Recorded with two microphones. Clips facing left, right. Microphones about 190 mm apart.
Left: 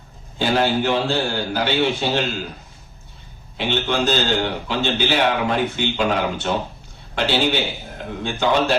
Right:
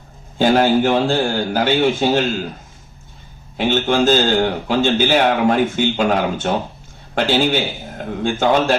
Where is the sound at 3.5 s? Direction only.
45° right (ahead or behind).